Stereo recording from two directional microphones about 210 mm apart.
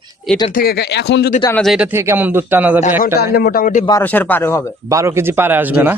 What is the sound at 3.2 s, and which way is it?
Speech, 50° left (ahead or behind).